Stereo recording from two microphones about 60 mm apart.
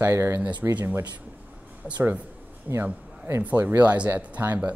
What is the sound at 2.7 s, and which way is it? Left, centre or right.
Speech, right.